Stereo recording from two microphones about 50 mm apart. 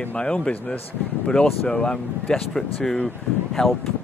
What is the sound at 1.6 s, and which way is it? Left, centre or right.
Speech, centre.